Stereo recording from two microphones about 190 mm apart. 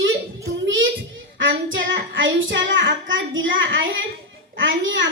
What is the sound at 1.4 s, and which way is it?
Child singing, 75° right (ahead or behind).